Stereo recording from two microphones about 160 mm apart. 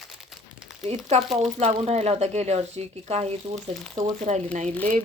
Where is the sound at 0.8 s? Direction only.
45° right (ahead or behind).